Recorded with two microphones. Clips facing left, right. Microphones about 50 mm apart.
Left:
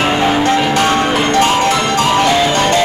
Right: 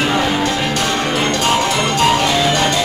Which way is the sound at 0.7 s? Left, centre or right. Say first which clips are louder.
Left 5 dB; left.